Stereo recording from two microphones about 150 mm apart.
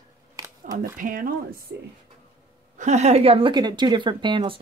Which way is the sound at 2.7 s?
50° right (ahead or behind).